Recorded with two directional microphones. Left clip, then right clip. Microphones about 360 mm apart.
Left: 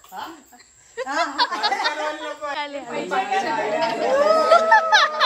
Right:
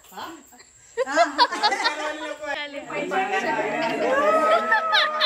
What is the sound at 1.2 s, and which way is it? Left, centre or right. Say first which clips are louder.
Speech: right 2 dB; centre.